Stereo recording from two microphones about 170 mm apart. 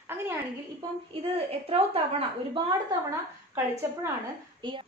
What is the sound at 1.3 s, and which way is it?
A woman's voice, 35° right (ahead or behind).